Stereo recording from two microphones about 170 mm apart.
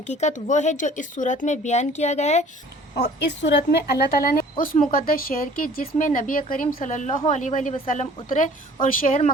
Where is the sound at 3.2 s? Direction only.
90° left; by 9.1 s 50° left (ahead or behind).